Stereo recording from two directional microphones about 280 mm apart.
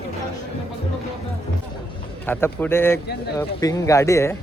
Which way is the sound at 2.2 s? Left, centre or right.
Centre.